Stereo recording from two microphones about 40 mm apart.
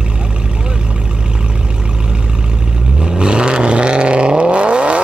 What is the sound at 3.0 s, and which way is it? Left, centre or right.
Vehicle, right.